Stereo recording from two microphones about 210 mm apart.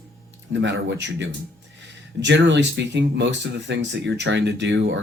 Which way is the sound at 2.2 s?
55° right (ahead or behind).